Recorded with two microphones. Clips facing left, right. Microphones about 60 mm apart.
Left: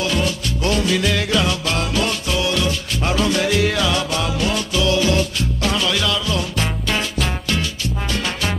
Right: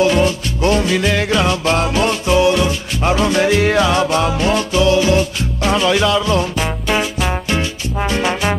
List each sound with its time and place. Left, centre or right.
0.0 s music: right
6.5 s music: centre